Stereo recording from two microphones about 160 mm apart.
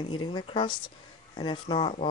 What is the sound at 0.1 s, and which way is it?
Speech, 30° left (ahead or behind).